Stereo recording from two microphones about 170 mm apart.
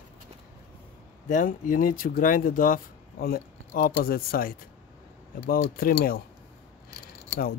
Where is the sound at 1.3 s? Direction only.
50° left (ahead or behind).